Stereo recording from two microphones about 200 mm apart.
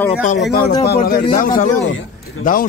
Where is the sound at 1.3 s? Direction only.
45° left (ahead or behind).